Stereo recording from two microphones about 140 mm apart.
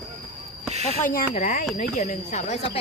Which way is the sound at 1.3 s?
55° left (ahead or behind).